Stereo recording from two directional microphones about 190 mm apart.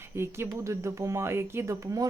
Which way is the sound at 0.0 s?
15° right (ahead or behind).